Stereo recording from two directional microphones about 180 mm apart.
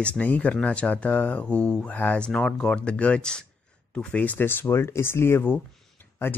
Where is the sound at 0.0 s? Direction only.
10° left (ahead or behind).